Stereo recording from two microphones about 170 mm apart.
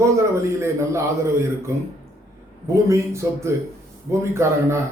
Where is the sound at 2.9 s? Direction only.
15° right (ahead or behind).